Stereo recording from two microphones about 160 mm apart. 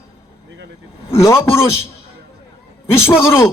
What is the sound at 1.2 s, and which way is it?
Speech, 15° left (ahead or behind).